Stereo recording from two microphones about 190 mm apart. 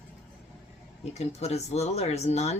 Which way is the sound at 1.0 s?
35° left (ahead or behind).